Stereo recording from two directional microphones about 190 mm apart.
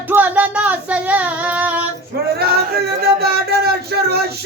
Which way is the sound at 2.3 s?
55° right (ahead or behind).